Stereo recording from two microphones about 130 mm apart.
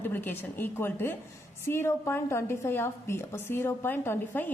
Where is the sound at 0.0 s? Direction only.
15° left (ahead or behind).